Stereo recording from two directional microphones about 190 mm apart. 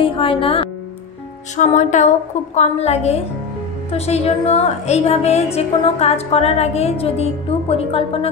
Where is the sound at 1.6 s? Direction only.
40° left (ahead or behind).